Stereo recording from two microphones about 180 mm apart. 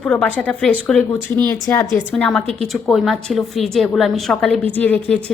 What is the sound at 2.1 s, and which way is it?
A woman's voice, 5° left (ahead or behind).